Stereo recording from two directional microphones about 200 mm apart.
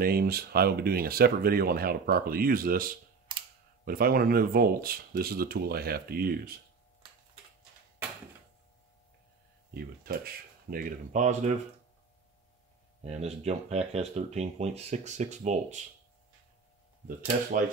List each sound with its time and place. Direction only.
0.0 s speech: 50° right (ahead or behind)
10.0 s speech: 50° right (ahead or behind)
13.0 s speech: 30° right (ahead or behind)